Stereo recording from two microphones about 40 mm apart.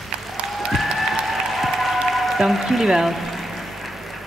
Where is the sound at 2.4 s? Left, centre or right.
Centre.